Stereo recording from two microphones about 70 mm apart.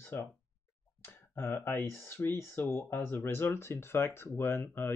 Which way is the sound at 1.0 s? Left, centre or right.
Left.